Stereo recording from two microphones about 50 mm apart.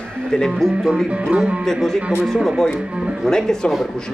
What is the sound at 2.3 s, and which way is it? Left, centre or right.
Speech, centre.